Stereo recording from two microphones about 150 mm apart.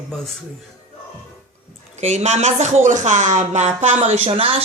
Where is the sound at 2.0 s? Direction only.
50° right (ahead or behind).